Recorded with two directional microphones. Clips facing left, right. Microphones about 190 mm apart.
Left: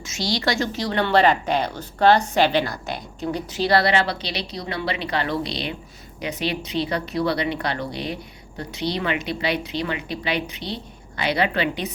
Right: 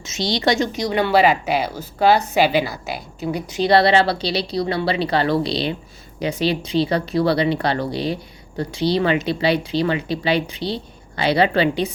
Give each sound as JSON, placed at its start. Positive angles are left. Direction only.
{"t": 0.0, "sound": "a woman's voice", "side_deg": -20}
{"t": 3.6, "sound": "a woman's voice", "side_deg": -25}